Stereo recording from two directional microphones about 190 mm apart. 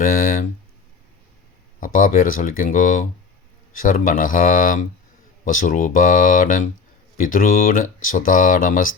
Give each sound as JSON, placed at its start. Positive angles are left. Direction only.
{"t": 0.0, "sound": "speech", "side_deg": 45}
{"t": 1.8, "sound": "speech", "side_deg": 45}